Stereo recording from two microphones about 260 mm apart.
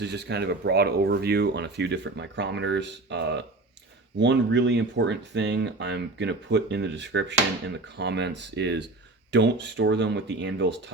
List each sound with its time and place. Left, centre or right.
0.0 s speech: right